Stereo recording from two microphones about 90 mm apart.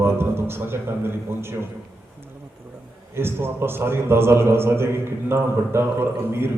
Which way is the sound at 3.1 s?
25° right (ahead or behind).